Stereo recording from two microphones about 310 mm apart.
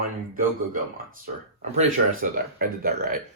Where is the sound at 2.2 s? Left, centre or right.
Right.